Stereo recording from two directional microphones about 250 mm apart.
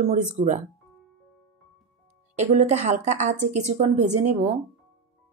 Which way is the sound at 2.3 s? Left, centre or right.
Right.